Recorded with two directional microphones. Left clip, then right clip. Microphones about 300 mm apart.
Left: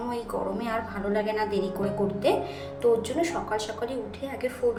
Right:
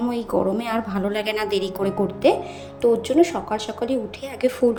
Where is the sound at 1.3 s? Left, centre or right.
Right.